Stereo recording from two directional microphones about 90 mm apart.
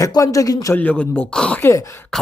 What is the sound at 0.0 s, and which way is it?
Speech, 40° left (ahead or behind).